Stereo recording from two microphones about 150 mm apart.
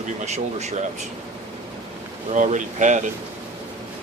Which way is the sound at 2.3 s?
55° right (ahead or behind).